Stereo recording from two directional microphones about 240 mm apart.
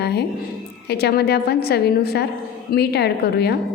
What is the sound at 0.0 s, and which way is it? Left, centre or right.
A woman's voice, left.